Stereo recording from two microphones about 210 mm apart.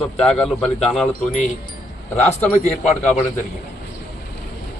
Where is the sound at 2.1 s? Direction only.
10° left (ahead or behind).